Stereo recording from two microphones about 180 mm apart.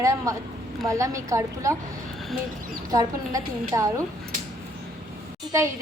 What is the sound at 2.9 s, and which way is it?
A woman's voice, 20° right (ahead or behind).